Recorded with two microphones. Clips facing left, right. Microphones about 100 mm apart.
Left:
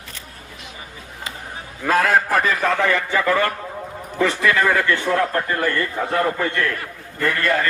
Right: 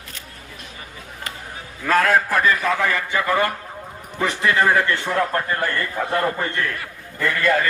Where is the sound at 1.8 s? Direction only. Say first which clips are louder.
Even; 5° left (ahead or behind).